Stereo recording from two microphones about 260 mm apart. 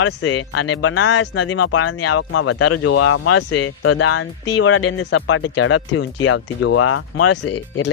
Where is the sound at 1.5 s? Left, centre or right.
Left.